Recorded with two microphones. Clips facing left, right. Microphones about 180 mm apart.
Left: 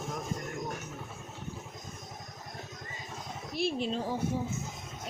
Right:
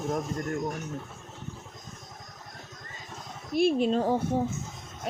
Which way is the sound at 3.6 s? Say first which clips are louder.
Right 8 dB; 50° right (ahead or behind).